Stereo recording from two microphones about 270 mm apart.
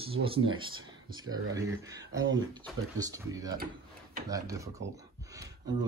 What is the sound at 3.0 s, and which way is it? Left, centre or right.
Speech, centre.